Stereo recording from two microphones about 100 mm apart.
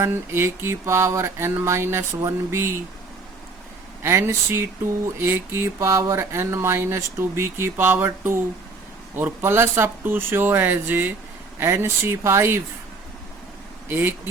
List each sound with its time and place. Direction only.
0.0 s speech: 25° right (ahead or behind)
4.0 s speech: 25° right (ahead or behind)
13.8 s speech: 20° right (ahead or behind)